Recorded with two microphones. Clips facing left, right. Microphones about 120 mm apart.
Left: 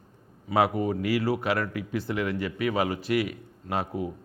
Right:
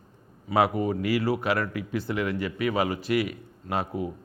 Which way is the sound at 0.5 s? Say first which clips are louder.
Right 1 dB; 20° right (ahead or behind).